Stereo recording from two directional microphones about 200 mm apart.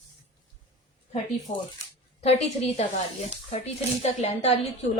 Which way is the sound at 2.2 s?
30° left (ahead or behind).